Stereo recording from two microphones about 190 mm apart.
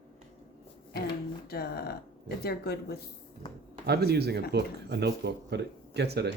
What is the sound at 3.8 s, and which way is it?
Speech, 55° right (ahead or behind).